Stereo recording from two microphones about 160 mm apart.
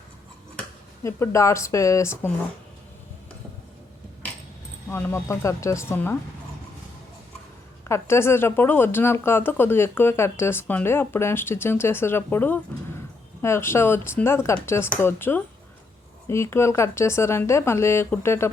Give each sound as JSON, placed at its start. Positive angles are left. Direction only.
{"t": 1.0, "sound": "speech", "side_deg": 20}
{"t": 4.9, "sound": "speech", "side_deg": 15}
{"t": 7.9, "sound": "speech", "side_deg": 15}